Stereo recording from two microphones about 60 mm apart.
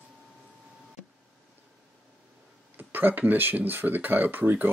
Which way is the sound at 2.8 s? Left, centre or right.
Right.